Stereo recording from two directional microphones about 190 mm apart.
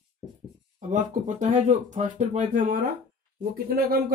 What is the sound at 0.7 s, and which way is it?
Speech, 40° right (ahead or behind).